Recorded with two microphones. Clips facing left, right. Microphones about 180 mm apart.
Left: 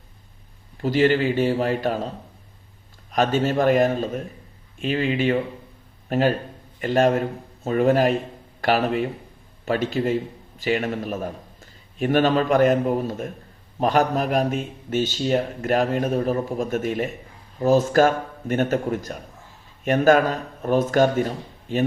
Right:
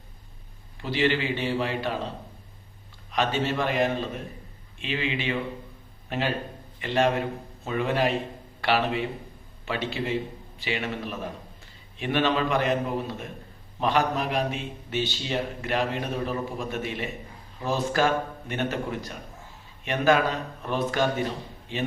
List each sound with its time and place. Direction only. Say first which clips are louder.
0.8 s a man's voice: left 6 dB; 45° left (ahead or behind)
3.1 s a man's voice: left 5 dB; 45° left (ahead or behind)